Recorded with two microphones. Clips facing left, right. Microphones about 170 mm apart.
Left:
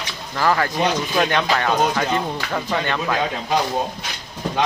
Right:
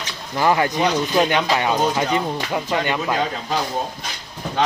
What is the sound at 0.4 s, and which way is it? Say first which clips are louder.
Speech: right 1 dB; 20° right (ahead or behind).